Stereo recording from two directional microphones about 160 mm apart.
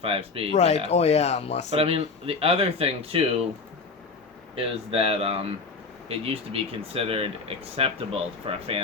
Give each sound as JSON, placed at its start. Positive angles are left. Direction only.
{"t": 0.0, "sound": "speech", "side_deg": -35}
{"t": 0.5, "sound": "speech", "side_deg": 40}
{"t": 1.7, "sound": "speech", "side_deg": -35}
{"t": 4.5, "sound": "speech", "side_deg": -35}